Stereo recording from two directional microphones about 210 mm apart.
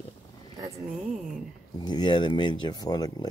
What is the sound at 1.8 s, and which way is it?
Speech, 20° left (ahead or behind).